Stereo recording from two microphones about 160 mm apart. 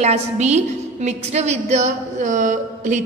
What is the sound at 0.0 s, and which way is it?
A woman's voice, 45° right (ahead or behind).